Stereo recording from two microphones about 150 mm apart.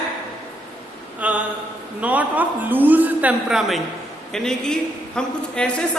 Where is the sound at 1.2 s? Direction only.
10° right (ahead or behind).